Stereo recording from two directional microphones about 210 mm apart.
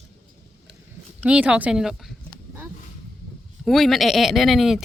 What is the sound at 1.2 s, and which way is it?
Speech, 5° right (ahead or behind).